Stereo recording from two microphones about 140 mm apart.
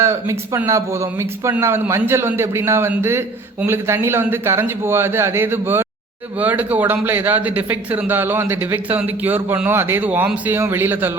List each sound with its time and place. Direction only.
0.0 s speech: 20° right (ahead or behind)